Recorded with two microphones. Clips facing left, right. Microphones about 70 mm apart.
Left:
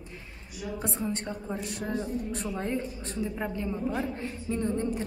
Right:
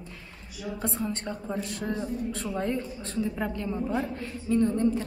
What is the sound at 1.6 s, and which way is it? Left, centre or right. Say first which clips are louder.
Speech: right 2 dB; centre.